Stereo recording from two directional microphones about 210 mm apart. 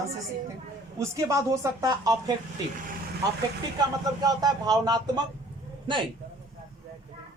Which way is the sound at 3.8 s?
20° right (ahead or behind).